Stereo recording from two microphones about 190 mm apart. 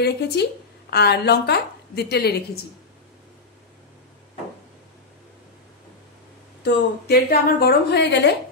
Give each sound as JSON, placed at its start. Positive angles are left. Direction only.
{"t": 0.0, "sound": "a woman's voice", "side_deg": 60}
{"t": 6.6, "sound": "a woman's voice", "side_deg": 55}